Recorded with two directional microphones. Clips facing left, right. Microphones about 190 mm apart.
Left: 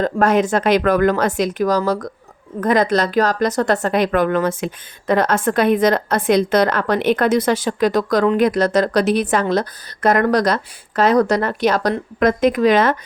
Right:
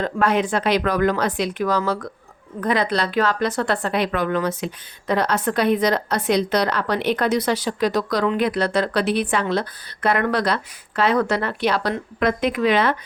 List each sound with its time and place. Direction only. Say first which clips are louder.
0.0 s a woman's voice: left 4 dB; 45° left (ahead or behind)